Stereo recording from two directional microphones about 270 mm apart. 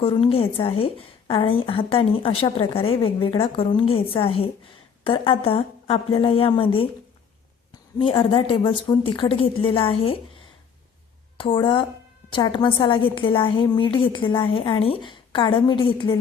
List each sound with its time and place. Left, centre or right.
0.0 s a woman's voice: centre
7.9 s a woman's voice: centre
11.3 s a woman's voice: centre